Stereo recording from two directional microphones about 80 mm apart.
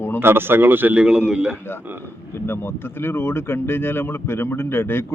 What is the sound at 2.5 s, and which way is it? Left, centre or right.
Speech, left.